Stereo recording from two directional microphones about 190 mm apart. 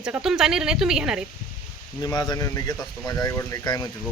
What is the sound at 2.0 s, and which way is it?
Speech, 20° left (ahead or behind).